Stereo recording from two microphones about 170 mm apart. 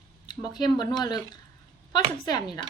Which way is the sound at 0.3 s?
25° left (ahead or behind).